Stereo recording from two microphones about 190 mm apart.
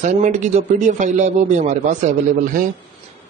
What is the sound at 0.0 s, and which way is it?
Speech, 40° right (ahead or behind).